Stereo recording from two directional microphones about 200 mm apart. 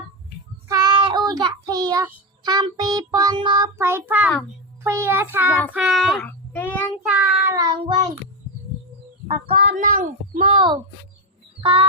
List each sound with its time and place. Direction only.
0.7 s child singing: 20° right (ahead or behind)
3.8 s child singing: 10° right (ahead or behind)
5.7 s a child's voice: centre (ahead or behind)
7.0 s child singing: 5° right (ahead or behind); by 8.0 s 20° right (ahead or behind)
9.7 s speech: 40° right (ahead or behind)
10.5 s a child's voice: 25° right (ahead or behind)
11.6 s music: 30° right (ahead or behind)